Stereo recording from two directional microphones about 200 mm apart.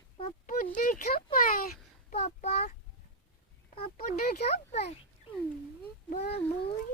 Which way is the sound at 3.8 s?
45° left (ahead or behind).